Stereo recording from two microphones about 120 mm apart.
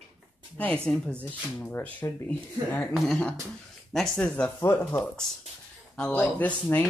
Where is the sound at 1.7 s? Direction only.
15° left (ahead or behind).